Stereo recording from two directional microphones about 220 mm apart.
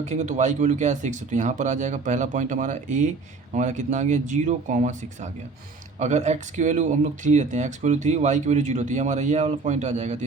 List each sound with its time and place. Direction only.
0.0 s speech: 30° right (ahead or behind)